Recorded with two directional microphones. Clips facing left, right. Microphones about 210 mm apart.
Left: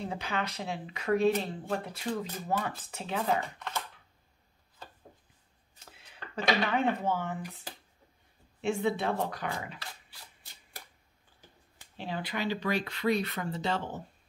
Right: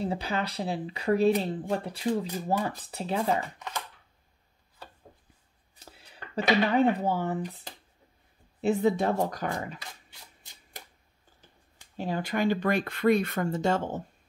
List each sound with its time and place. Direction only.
0.0 s speech: 35° right (ahead or behind)
3.5 s speech: 10° right (ahead or behind)
5.8 s speech: 35° right (ahead or behind)
12.0 s speech: 45° right (ahead or behind)